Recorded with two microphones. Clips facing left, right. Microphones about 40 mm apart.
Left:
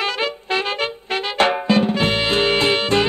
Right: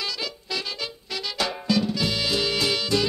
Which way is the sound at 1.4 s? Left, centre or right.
Left.